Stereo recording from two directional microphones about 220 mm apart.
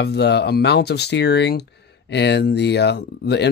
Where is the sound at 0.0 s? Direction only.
50° left (ahead or behind).